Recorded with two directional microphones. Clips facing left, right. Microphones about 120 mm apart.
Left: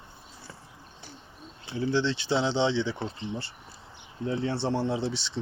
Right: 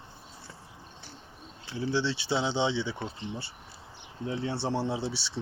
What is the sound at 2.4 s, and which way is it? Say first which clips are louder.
Speech: left 3 dB; 5° right (ahead or behind).